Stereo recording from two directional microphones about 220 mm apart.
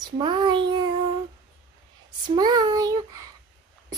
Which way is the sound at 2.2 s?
20° right (ahead or behind).